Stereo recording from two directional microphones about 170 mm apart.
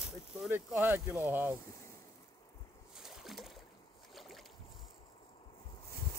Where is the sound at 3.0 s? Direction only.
Centre (ahead or behind).